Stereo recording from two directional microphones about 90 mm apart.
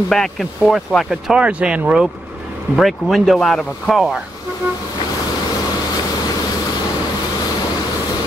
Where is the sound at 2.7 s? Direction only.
Centre (ahead or behind).